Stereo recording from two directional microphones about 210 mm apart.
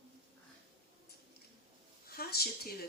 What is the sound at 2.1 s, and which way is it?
Speech, 45° left (ahead or behind).